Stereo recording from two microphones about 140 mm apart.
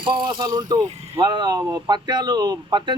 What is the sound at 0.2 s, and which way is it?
Speech, 30° right (ahead or behind).